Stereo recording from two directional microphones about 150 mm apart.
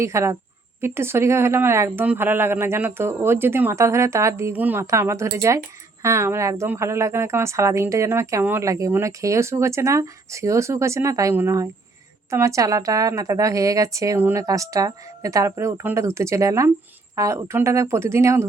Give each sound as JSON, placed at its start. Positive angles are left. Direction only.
{"t": 0.0, "sound": "speech", "side_deg": -20}